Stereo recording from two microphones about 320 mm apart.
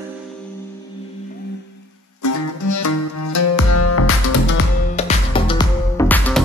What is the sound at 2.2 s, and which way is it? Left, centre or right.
Music, left.